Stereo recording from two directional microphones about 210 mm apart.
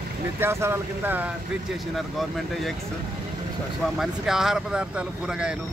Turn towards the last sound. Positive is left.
turn(degrees=-5)  # may be behind; listen again after turning